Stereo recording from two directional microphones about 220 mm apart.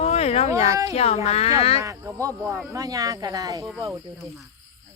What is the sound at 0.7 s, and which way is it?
Speech, 15° right (ahead or behind).